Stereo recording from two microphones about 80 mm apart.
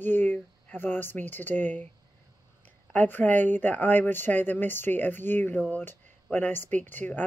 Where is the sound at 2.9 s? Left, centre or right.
Left.